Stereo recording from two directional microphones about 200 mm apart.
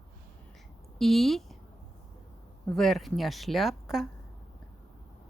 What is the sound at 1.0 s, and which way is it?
Speech, centre (ahead or behind).